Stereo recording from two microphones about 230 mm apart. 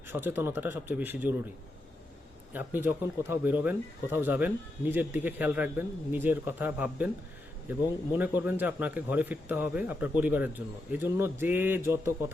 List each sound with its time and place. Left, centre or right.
0.1 s speech: centre
2.5 s speech: centre